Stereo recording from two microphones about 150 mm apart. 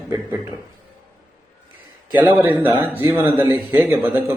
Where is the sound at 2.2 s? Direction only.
10° right (ahead or behind).